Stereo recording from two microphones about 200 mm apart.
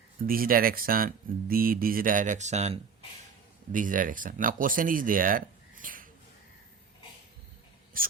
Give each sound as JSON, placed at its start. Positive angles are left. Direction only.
{"t": 0.3, "sound": "speech", "side_deg": -45}
{"t": 7.9, "sound": "speech", "side_deg": -45}